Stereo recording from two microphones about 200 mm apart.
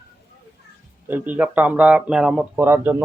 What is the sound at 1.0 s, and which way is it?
Speech, 10° right (ahead or behind).